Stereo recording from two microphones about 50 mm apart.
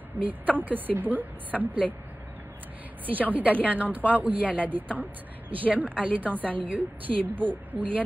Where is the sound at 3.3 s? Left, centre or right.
Right.